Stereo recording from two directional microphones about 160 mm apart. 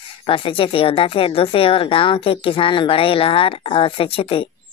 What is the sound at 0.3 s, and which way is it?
A woman's voice, 35° left (ahead or behind).